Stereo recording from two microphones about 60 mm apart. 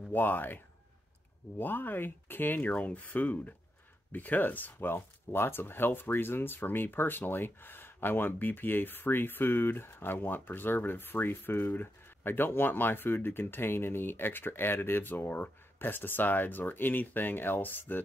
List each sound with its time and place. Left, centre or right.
0.1 s speech: left
1.6 s speech: left
4.9 s speech: left